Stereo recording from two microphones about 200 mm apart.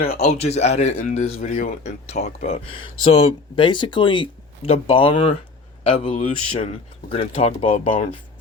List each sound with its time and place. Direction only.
0.0 s speech: 30° left (ahead or behind)